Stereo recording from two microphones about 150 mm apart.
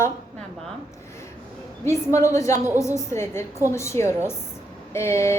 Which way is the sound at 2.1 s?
20° left (ahead or behind).